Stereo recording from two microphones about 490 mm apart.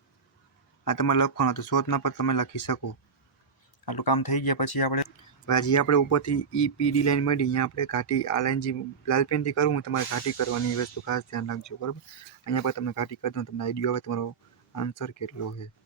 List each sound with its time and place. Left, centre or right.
0.9 s speech: left
5.5 s speech: left